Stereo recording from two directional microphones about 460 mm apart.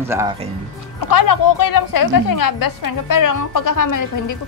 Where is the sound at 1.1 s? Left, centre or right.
Left.